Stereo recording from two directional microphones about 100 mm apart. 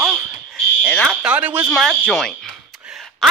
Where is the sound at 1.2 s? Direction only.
15° right (ahead or behind).